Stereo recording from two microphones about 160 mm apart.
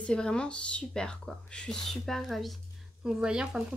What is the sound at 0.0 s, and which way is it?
Speech, 5° left (ahead or behind).